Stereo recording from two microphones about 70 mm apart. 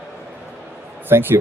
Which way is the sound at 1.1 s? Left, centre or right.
Right.